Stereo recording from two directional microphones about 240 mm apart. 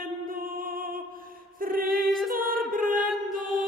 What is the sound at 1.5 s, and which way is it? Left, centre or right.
A capella, right.